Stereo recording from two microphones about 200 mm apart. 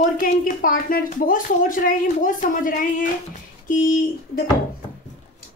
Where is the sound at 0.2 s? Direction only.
45° left (ahead or behind).